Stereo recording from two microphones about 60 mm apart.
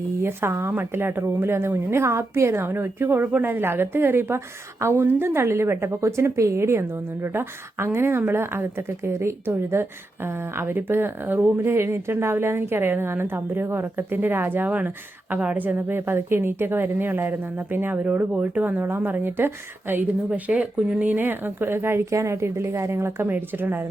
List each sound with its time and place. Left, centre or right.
0.2 s a woman's voice: right
0.7 s a woman's voice: right
20.5 s speech: centre
21.0 s speech: right
22.1 s a woman's voice: right
23.3 s speech: right